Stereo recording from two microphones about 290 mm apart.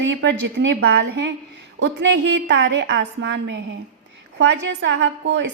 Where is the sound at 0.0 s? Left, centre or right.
Right.